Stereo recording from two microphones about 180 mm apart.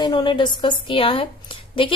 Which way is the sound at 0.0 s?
25° left (ahead or behind).